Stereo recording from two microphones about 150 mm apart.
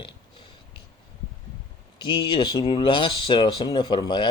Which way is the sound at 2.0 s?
30° left (ahead or behind).